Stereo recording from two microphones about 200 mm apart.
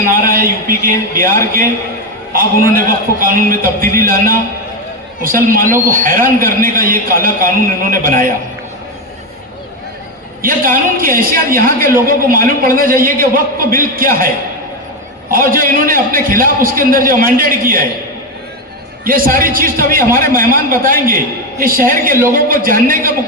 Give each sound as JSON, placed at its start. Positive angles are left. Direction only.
{"t": 0.1, "sound": "a man's voice", "side_deg": -45}
{"t": 2.3, "sound": "a man's voice", "side_deg": -45}
{"t": 10.4, "sound": "a man's voice", "side_deg": -45}
{"t": 15.3, "sound": "a man's voice", "side_deg": -45}
{"t": 19.0, "sound": "a man's voice", "side_deg": -45}